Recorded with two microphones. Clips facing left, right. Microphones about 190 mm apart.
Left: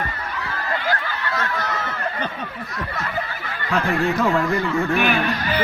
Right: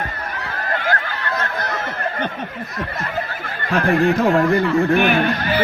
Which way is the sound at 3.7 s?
60° right (ahead or behind).